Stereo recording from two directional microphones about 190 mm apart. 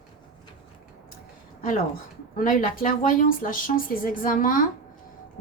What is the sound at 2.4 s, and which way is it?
Speech, 45° left (ahead or behind).